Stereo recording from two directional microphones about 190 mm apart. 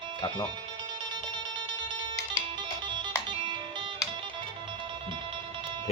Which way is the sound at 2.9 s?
25° right (ahead or behind).